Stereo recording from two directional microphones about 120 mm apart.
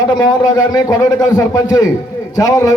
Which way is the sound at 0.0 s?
35° left (ahead or behind).